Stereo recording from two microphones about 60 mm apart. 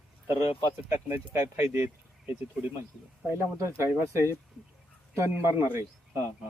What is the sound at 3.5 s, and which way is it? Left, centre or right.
Speech, right.